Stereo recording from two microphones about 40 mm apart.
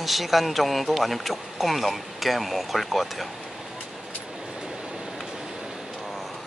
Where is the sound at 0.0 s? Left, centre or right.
Centre.